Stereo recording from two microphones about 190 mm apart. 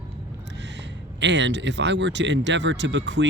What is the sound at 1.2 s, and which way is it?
Speech, 65° right (ahead or behind).